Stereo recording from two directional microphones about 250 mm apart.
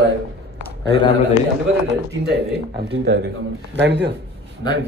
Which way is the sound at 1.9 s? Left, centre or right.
Right.